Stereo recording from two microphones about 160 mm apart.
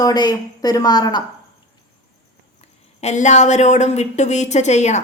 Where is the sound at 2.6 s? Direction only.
45° left (ahead or behind).